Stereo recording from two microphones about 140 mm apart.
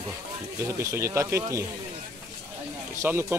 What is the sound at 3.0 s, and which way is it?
Speech, 10° right (ahead or behind).